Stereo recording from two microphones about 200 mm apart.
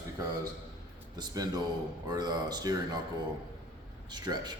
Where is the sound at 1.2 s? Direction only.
20° right (ahead or behind).